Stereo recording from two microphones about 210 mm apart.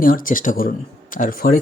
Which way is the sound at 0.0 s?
40° left (ahead or behind).